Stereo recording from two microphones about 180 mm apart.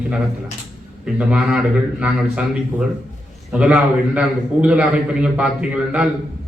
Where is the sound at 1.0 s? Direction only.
5° right (ahead or behind).